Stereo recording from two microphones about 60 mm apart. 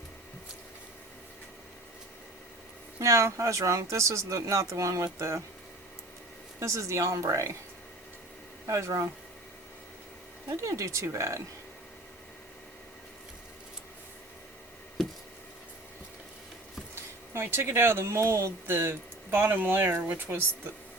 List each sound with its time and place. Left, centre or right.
3.0 s speech: right
6.6 s speech: right
8.6 s speech: right
10.6 s speech: right
16.9 s speech: right